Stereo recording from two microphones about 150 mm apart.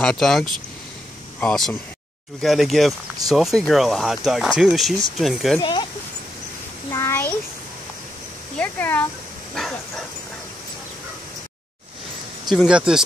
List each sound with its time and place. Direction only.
0.0 s speech: centre (ahead or behind)
5.6 s speech: 30° left (ahead or behind)
6.9 s a sound: 15° left (ahead or behind)
8.5 s speech: 10° left (ahead or behind)
12.4 s speech: 5° right (ahead or behind)